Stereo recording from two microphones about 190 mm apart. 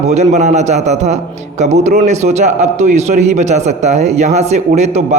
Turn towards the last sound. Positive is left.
turn(degrees=-35)  # may be behind; listen again after turning